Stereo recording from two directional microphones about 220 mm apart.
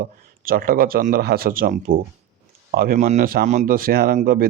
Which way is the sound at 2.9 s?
30° right (ahead or behind).